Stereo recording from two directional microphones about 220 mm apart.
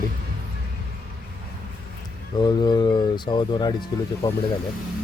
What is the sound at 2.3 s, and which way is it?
Speech, 20° left (ahead or behind).